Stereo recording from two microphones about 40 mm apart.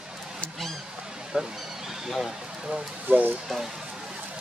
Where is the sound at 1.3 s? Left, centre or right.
Right.